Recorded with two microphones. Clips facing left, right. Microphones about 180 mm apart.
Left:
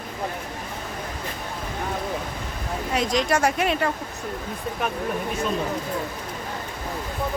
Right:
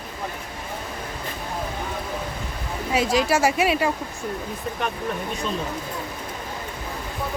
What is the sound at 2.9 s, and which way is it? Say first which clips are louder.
Speech: right 2 dB; 5° right (ahead or behind).